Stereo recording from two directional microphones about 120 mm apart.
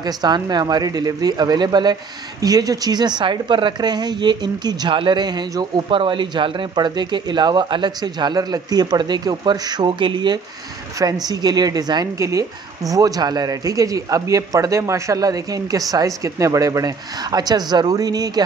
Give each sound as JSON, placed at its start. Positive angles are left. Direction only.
{"t": 0.0, "sound": "a woman's voice", "side_deg": -35}